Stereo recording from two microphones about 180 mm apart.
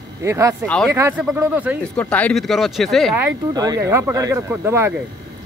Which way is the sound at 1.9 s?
10° left (ahead or behind).